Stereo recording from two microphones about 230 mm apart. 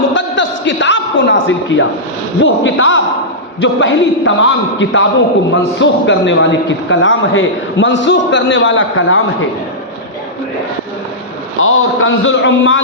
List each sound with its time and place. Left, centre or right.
0.1 s a sound: left
2.4 s a man's voice: left
11.6 s a man's voice: left